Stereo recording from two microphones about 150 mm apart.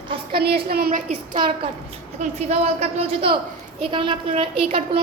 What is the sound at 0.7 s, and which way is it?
Speech, 80° right.